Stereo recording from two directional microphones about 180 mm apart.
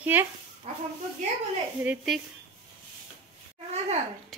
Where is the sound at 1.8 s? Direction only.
5° right (ahead or behind).